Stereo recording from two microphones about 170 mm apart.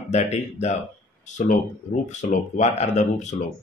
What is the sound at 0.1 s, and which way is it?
Speech, 40° left (ahead or behind).